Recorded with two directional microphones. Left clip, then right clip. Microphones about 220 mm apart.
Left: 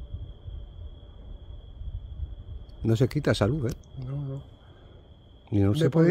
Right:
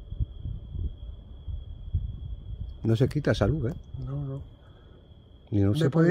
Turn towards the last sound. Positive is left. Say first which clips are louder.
# left 2 dB
turn(degrees=5)  # may be behind; listen again after turning